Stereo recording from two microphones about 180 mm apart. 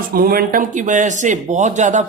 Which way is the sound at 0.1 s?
55° right (ahead or behind).